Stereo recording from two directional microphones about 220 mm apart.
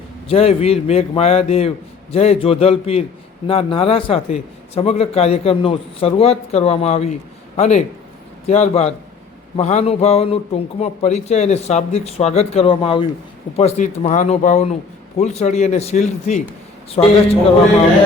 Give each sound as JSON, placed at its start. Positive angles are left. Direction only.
{"t": 0.3, "sound": "a man's voice", "side_deg": 30}